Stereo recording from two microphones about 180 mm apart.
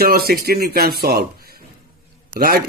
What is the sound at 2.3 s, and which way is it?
Speech, 55° right (ahead or behind).